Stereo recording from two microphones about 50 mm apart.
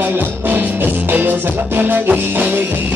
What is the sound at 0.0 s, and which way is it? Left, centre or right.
Music, right.